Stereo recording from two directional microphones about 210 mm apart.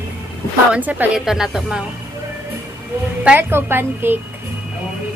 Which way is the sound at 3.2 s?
10° right (ahead or behind).